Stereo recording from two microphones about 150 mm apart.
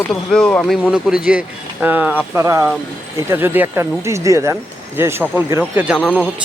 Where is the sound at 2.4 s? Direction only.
20° right (ahead or behind).